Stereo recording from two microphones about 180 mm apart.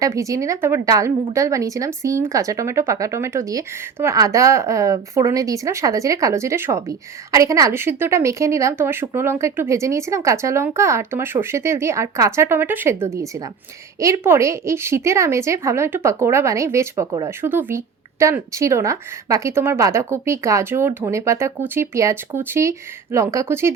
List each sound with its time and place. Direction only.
0.0 s a woman's voice: 15° right (ahead or behind)